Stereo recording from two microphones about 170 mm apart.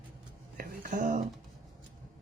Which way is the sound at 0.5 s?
55° right (ahead or behind).